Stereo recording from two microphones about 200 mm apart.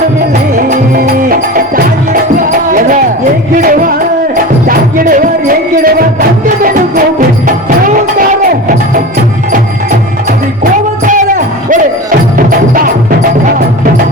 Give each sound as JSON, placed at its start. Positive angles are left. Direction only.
{"t": 0.5, "sound": "music", "side_deg": -45}
{"t": 10.6, "sound": "music", "side_deg": -40}